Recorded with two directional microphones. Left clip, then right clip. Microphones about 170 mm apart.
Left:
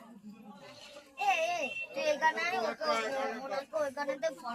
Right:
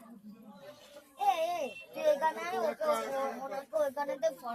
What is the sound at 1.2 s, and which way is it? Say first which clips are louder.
Speech: even; 70° right (ahead or behind).